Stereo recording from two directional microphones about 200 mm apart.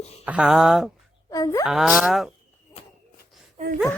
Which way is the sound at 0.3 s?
5° right (ahead or behind).